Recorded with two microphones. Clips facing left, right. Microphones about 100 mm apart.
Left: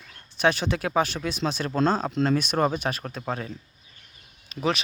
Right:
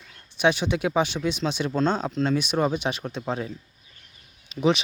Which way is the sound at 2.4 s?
10° right (ahead or behind).